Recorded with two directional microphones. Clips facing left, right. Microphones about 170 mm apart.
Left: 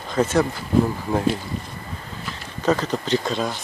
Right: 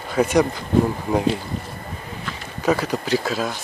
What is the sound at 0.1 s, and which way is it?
Speech, 15° right (ahead or behind).